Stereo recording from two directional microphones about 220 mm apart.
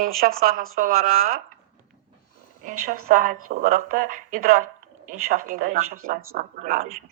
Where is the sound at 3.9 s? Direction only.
35° right (ahead or behind).